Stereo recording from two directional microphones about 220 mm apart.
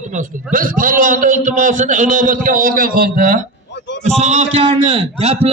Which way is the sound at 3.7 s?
55° left (ahead or behind).